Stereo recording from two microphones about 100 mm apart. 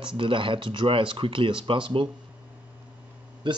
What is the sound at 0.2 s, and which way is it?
A man's voice, 60° right (ahead or behind).